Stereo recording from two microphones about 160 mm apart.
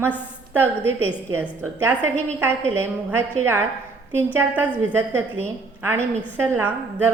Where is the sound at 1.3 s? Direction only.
15° right (ahead or behind).